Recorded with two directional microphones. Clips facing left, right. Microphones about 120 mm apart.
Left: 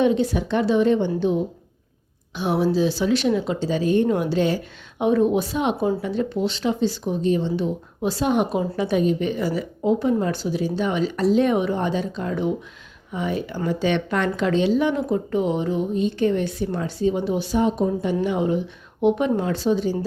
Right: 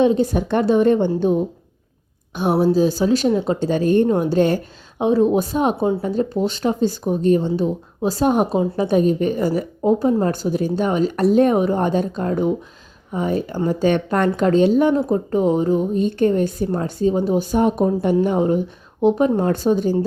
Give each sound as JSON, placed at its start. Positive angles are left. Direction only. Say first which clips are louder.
{"t": 0.0, "sound": "speech", "louder": "right 3 dB", "side_deg": -40}
{"t": 2.3, "sound": "speech", "louder": "right 4 dB", "side_deg": -50}
{"t": 4.1, "sound": "speech", "louder": "right 4 dB", "side_deg": -35}
{"t": 4.4, "sound": "speech", "louder": "right 4 dB", "side_deg": -50}
{"t": 4.9, "sound": "speech", "louder": "right 3 dB", "side_deg": -30}